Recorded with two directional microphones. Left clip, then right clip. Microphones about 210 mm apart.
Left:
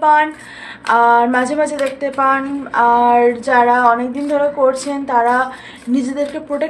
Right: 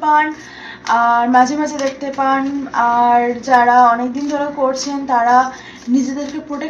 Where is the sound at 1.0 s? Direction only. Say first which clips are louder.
Right 1 dB; 45° left (ahead or behind).